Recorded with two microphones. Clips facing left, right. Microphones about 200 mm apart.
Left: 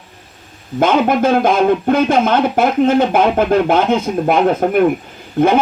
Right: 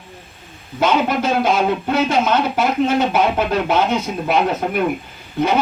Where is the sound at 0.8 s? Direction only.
50° left (ahead or behind).